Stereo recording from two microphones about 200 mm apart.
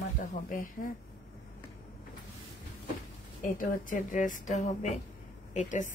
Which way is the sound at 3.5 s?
40° left (ahead or behind).